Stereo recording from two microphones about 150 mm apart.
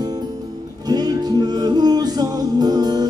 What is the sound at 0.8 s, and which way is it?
Music, 25° right (ahead or behind).